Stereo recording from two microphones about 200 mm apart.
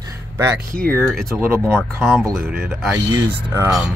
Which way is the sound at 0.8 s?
Centre (ahead or behind).